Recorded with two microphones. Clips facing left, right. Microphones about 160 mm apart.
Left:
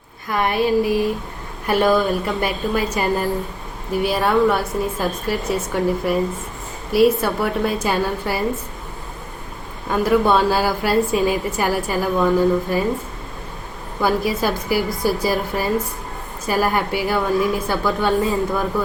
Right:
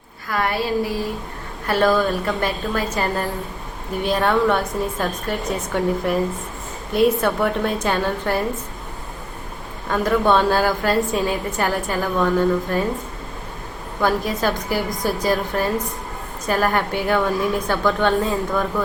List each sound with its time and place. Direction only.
0.3 s a woman's voice: 20° left (ahead or behind)
9.9 s a woman's voice: 10° left (ahead or behind)
14.0 s a woman's voice: 10° left (ahead or behind)